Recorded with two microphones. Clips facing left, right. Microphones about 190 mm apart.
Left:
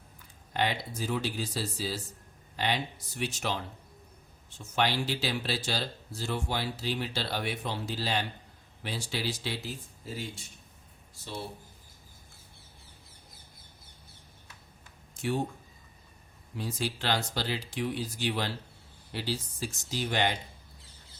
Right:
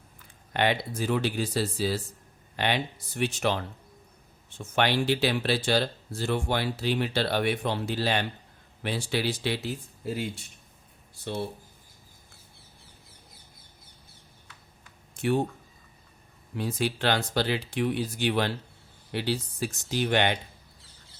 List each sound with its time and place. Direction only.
0.5 s speech: 65° right (ahead or behind)
15.1 s a sound: 60° right (ahead or behind)
16.6 s speech: 60° right (ahead or behind)